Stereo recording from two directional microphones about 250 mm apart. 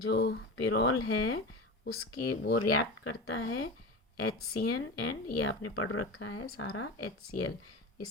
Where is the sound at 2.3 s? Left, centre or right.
Left.